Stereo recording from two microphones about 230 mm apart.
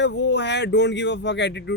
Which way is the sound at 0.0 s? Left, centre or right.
Left.